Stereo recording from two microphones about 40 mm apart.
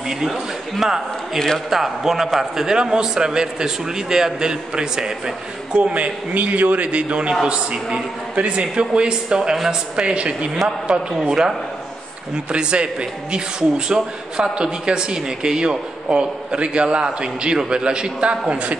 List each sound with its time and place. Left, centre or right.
0.3 s a man's voice: centre
2.6 s a man's voice: centre
5.9 s a man's voice: right
8.4 s a man's voice: right
10.9 s a man's voice: centre; by 18.8 s right